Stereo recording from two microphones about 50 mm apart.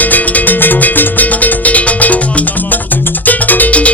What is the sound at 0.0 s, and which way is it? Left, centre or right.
Music, left.